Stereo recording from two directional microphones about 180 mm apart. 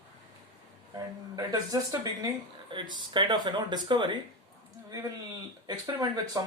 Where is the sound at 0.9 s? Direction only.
20° right (ahead or behind).